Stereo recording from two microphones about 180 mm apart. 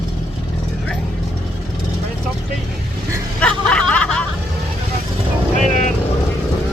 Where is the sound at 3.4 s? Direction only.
5° left (ahead or behind).